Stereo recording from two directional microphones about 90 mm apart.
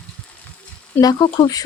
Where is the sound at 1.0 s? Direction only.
50° left (ahead or behind).